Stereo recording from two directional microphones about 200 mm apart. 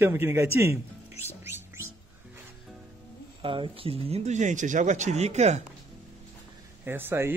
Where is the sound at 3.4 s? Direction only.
25° right (ahead or behind).